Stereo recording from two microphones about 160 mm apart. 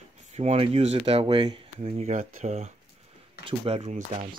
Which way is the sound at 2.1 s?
45° right (ahead or behind).